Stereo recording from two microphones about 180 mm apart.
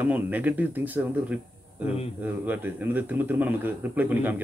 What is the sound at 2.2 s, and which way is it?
A man's voice, 10° right (ahead or behind).